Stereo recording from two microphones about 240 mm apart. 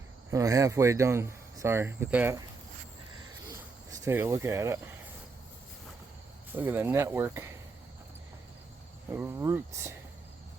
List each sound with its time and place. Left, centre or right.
0.3 s speech: centre
3.5 s a sound: centre
6.5 s speech: centre
9.1 s speech: centre